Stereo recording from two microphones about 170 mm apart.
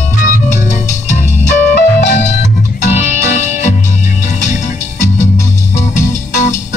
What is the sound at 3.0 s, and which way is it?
Music, 10° right (ahead or behind).